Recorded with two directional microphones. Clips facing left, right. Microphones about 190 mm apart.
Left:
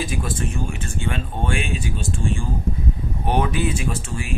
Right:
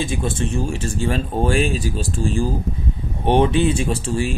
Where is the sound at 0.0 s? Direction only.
25° right (ahead or behind).